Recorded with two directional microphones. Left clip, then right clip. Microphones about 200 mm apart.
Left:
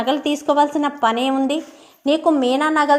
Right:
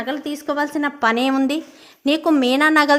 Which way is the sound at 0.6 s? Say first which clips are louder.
Left 3 dB; 10° right (ahead or behind).